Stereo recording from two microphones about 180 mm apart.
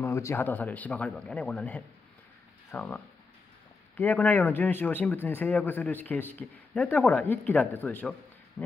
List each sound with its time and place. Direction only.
0.0 s speech: 15° left (ahead or behind)
3.9 s speech: 10° left (ahead or behind)